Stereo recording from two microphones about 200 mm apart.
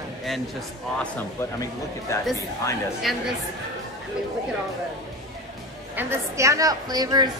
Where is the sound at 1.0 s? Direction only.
10° left (ahead or behind).